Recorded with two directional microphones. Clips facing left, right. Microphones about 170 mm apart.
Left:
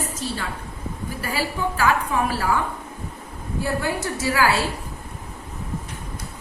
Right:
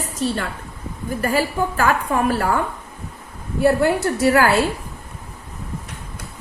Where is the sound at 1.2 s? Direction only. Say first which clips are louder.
Right 6 dB; 50° right (ahead or behind).